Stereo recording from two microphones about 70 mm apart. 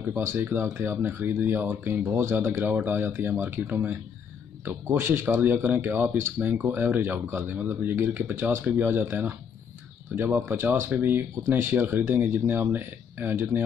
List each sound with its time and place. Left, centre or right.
0.1 s speech: right